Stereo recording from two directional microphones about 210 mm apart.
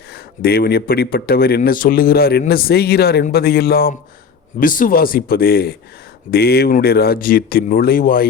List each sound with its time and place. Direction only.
0.1 s speech: 50° left (ahead or behind)